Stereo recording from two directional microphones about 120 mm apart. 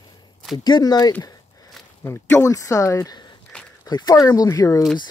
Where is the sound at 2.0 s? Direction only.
20° left (ahead or behind).